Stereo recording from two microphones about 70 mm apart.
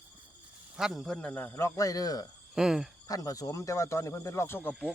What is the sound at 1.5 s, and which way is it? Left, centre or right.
Speech, left.